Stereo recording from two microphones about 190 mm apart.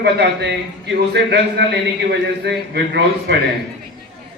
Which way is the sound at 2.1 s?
65° right (ahead or behind).